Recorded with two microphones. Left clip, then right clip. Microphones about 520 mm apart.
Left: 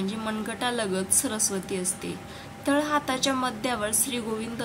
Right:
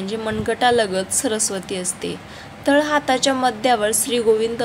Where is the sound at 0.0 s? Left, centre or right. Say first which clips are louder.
Right 8 dB; left.